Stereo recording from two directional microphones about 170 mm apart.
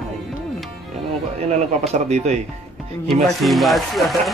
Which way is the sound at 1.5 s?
40° right (ahead or behind).